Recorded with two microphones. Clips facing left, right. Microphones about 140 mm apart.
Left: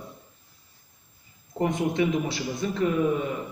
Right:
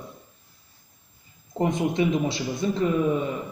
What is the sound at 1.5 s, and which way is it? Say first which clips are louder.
Speech: right 1 dB; 25° right (ahead or behind).